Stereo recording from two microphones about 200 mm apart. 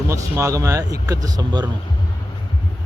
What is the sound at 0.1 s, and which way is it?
Speech, 15° right (ahead or behind).